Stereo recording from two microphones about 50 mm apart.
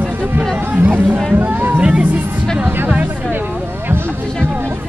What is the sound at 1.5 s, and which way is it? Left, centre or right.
Music, right.